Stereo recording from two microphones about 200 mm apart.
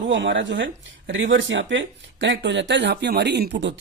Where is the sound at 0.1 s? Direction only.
65° right (ahead or behind).